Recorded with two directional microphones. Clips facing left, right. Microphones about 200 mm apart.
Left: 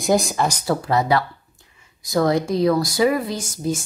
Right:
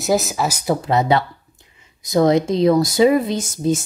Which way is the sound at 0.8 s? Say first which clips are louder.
Right 2 dB; 20° right (ahead or behind).